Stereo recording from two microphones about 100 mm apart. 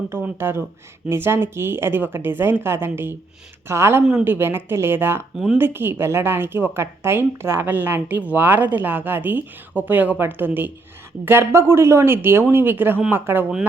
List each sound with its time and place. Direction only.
0.1 s a woman's voice: 25° right (ahead or behind)